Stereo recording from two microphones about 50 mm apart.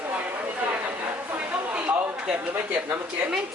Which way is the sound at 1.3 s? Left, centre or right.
Right.